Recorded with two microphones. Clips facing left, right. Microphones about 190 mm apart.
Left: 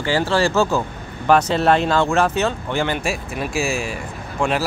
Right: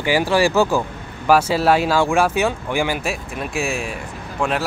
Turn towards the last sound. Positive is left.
turn(degrees=-5)  # may be behind; listen again after turning